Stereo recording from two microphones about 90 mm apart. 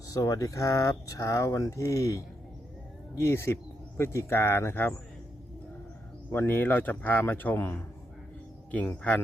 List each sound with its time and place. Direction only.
0.1 s speech: 40° left (ahead or behind)
6.3 s speech: 25° left (ahead or behind)
9.0 s speech: 15° left (ahead or behind)